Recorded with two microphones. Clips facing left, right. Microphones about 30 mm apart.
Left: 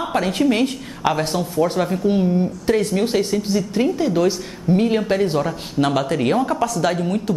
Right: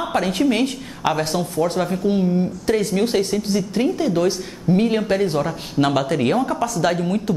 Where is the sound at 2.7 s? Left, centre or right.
Centre.